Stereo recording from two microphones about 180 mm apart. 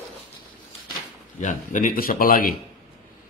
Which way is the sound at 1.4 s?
45° left (ahead or behind).